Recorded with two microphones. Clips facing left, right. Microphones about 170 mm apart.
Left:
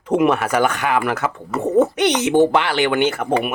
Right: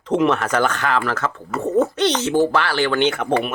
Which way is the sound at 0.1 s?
10° left (ahead or behind).